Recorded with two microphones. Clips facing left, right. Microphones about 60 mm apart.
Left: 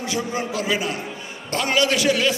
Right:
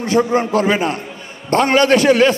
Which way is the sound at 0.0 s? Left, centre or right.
Right.